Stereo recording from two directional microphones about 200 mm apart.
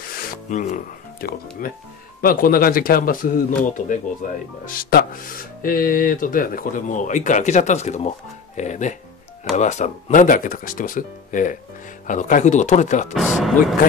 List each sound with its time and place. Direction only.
0.0 s speech: 45° left (ahead or behind)
13.1 s speech: centre (ahead or behind)